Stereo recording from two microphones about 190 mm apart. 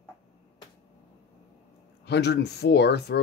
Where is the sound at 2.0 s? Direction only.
60° left (ahead or behind).